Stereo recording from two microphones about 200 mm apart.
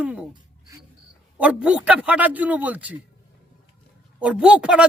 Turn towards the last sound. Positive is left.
turn(degrees=-5)  # may be behind; listen again after turning